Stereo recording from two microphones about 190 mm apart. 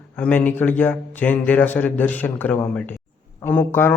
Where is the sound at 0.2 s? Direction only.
10° left (ahead or behind).